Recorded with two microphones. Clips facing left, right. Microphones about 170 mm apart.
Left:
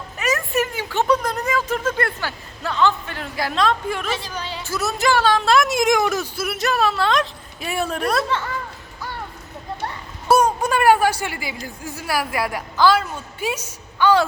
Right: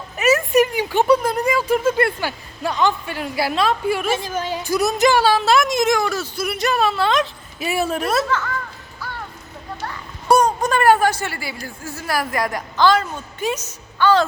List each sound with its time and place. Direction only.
0.2 s a sound: 15° right (ahead or behind)
4.1 s a woman's voice: 50° right (ahead or behind)
4.6 s speech: 15° right (ahead or behind)
5.2 s speech: 5° right (ahead or behind); by 6.2 s 15° left (ahead or behind)
6.3 s speech: 5° left (ahead or behind)
10.2 s speech: 5° left (ahead or behind)